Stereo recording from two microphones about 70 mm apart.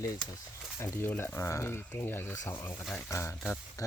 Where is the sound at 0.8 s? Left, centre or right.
Left.